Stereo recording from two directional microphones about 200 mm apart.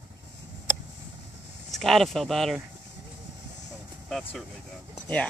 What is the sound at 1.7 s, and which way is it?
Speech, centre (ahead or behind).